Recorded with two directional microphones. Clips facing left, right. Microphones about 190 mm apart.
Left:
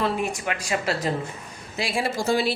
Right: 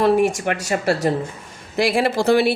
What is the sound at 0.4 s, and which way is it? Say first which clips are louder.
Speech: right 6 dB; 45° right (ahead or behind).